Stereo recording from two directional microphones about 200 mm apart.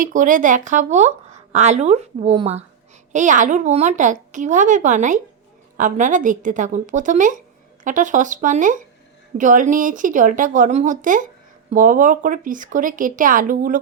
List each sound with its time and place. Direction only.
0.0 s a woman's voice: 40° right (ahead or behind)